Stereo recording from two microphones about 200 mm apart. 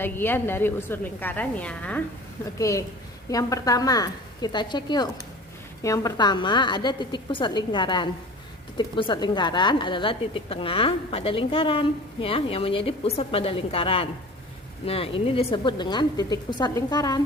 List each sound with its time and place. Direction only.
0.0 s a woman's voice: 10° left (ahead or behind)